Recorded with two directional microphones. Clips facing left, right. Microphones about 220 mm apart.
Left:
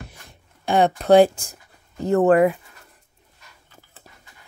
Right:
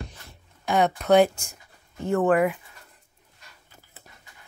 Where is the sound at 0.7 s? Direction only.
30° left (ahead or behind).